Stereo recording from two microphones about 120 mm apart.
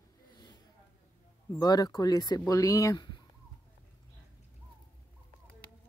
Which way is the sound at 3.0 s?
40° left (ahead or behind).